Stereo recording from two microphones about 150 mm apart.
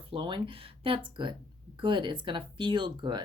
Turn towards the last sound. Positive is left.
turn(degrees=-30)  # may be behind; listen again after turning